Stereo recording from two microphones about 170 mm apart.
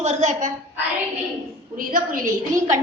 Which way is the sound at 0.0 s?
45° right (ahead or behind).